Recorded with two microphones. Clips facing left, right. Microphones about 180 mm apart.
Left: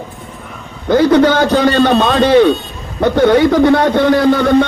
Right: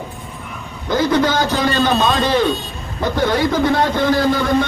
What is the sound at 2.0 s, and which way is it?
A man's voice, 60° left (ahead or behind).